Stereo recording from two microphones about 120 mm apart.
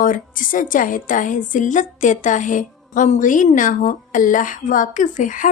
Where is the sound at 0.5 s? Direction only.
90° left.